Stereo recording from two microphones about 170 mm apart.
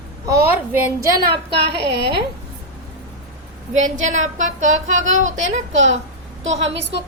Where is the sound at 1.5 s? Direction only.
80° right.